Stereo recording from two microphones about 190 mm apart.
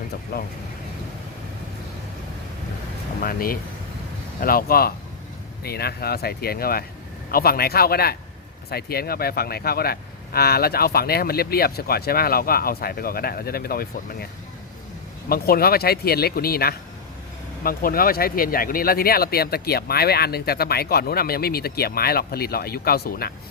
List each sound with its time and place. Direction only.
0.3 s speech: 55° left (ahead or behind)
3.2 s speech: 50° left (ahead or behind)
15.3 s speech: 55° left (ahead or behind)